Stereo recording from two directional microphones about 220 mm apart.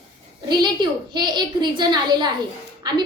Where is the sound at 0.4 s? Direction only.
20° right (ahead or behind).